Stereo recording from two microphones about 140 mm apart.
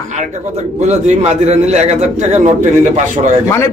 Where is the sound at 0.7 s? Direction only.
55° right (ahead or behind).